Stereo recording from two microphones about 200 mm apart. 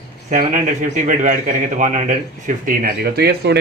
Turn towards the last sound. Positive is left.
turn(degrees=-55)  # may be behind; listen again after turning